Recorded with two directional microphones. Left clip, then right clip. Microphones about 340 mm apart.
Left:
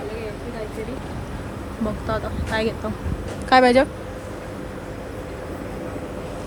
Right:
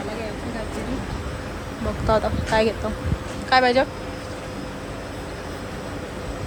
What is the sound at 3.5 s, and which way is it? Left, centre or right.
Speech, centre.